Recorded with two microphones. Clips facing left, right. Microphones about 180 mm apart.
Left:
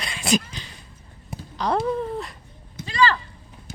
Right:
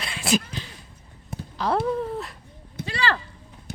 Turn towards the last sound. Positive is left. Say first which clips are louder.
# left 5 dB
turn(degrees=-60)  # may be behind; listen again after turning